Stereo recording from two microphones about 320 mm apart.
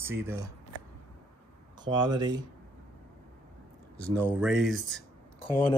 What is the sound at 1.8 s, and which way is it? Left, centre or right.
Speech, centre.